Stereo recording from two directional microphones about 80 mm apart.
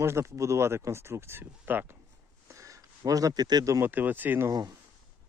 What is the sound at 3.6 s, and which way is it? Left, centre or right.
Speech, right.